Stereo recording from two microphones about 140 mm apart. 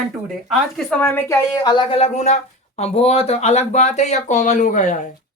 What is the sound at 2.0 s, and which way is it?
A woman's voice, 55° left (ahead or behind).